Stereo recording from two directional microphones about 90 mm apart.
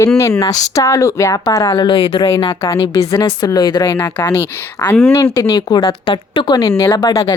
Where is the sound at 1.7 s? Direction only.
65° left (ahead or behind).